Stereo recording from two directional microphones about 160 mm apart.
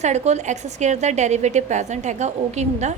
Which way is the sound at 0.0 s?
45° right (ahead or behind).